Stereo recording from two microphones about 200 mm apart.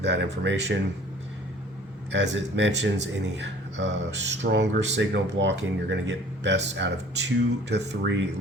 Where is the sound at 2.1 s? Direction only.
65° right (ahead or behind).